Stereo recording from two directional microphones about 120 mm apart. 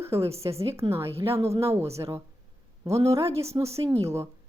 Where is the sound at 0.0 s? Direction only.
20° right (ahead or behind).